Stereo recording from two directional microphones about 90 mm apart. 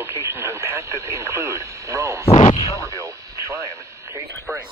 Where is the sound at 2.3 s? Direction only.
85° left.